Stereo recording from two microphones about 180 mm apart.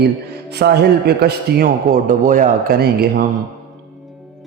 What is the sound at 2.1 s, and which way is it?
A man's voice, 45° right (ahead or behind).